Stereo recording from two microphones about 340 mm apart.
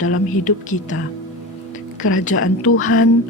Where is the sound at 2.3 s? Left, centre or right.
Left.